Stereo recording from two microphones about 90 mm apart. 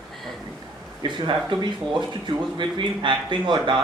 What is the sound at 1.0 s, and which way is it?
Speech, 60° right (ahead or behind).